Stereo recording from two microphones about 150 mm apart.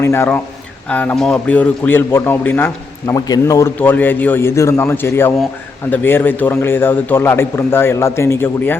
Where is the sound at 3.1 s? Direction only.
25° left (ahead or behind).